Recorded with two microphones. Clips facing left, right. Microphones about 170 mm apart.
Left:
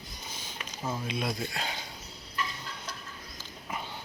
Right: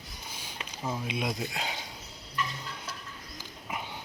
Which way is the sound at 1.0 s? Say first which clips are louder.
Even; 15° right (ahead or behind).